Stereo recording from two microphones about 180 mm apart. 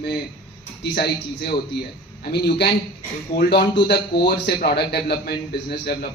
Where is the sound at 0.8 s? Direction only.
65° left (ahead or behind).